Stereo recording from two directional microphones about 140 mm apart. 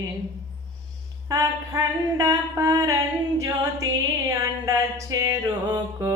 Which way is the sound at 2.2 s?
20° right (ahead or behind).